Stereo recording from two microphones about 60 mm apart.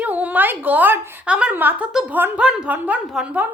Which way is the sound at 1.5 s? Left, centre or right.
Right.